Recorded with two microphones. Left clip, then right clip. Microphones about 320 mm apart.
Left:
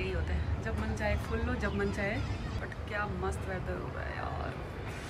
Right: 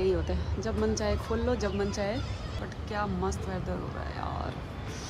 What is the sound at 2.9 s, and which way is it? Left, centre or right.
Speech, centre.